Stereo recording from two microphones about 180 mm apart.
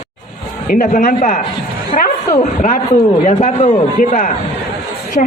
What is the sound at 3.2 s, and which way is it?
A man's voice, 40° left (ahead or behind).